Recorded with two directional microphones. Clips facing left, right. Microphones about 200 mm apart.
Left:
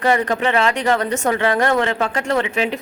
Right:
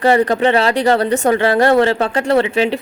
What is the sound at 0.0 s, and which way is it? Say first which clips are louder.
A woman's voice: right 5 dB; 35° right (ahead or behind).